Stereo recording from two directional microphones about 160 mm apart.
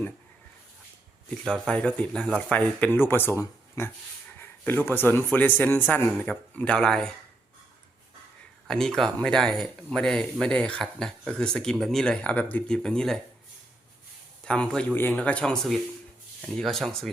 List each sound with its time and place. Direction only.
1.5 s a man's voice: 5° left (ahead or behind)
8.6 s speech: 5° left (ahead or behind)
14.4 s speech: 5° left (ahead or behind)